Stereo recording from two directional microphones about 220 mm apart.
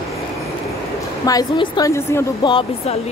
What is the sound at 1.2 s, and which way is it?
A woman's voice, 20° left (ahead or behind).